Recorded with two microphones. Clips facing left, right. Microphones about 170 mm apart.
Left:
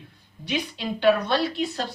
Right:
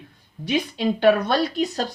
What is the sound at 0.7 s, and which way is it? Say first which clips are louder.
Speech: right 3 dB; 45° right (ahead or behind).